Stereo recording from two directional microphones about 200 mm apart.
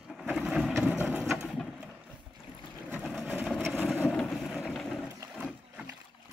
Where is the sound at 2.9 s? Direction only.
Centre (ahead or behind).